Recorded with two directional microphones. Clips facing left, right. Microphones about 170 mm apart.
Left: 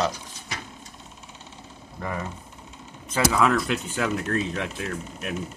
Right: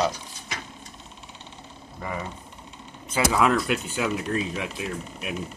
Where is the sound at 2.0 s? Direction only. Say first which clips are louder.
Left 1 dB; 5° right (ahead or behind).